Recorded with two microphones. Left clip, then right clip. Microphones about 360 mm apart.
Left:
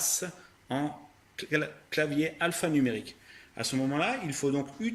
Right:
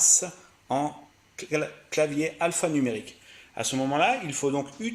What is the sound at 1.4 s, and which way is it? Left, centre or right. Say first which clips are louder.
Speech: right 2 dB; centre.